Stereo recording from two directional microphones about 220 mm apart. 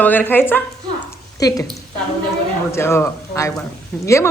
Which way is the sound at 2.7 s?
10° left (ahead or behind).